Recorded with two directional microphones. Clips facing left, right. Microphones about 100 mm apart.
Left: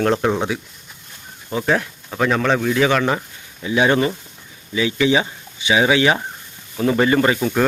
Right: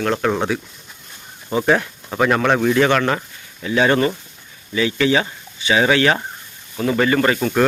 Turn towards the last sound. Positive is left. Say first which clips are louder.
# even
turn(degrees=5)  # may be behind; listen again after turning